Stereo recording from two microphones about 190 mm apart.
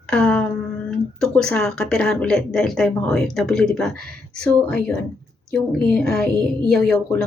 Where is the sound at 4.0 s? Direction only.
55° right (ahead or behind).